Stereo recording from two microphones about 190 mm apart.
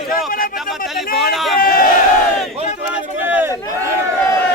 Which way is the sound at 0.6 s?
Centre (ahead or behind).